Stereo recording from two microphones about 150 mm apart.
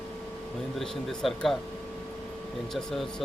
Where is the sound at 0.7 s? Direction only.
Centre (ahead or behind).